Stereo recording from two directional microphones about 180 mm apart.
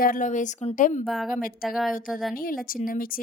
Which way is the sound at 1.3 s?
50° left (ahead or behind).